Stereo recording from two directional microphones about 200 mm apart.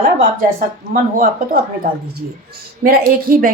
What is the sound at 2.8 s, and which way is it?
Speech, 50° right (ahead or behind).